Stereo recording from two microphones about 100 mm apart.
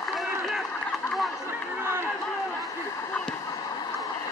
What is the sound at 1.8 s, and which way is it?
Run, 25° right (ahead or behind).